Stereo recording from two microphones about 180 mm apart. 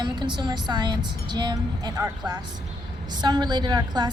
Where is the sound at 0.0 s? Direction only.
25° right (ahead or behind).